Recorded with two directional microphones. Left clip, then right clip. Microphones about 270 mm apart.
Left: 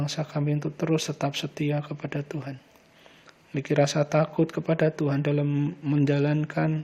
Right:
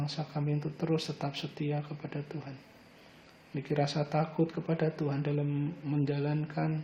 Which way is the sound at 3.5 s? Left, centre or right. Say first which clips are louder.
Left 9 dB; left.